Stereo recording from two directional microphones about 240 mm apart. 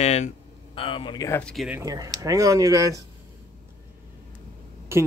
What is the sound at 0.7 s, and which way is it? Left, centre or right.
Speech, left.